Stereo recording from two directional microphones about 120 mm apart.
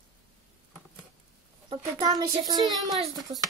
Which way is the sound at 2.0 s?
30° right (ahead or behind).